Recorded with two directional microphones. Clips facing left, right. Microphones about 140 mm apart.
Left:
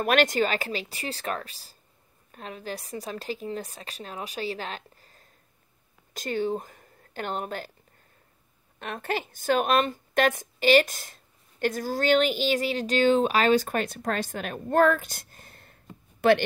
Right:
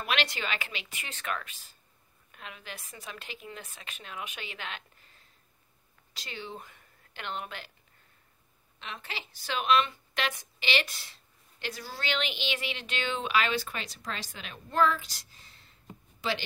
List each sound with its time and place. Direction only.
0.0 s speech: 45° left (ahead or behind)
8.7 s a woman's voice: 50° left (ahead or behind)